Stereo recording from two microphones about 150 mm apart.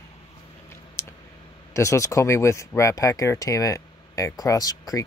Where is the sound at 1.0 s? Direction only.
15° left (ahead or behind).